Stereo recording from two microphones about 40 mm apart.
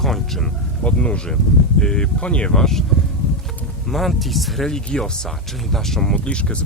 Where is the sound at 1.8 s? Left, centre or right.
Centre.